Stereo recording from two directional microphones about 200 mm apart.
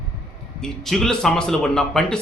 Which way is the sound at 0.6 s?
Centre (ahead or behind).